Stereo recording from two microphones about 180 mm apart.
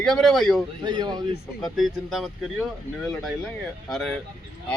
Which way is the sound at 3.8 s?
Centre (ahead or behind).